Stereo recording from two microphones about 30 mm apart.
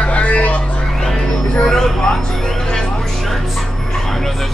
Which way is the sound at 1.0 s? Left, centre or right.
Centre.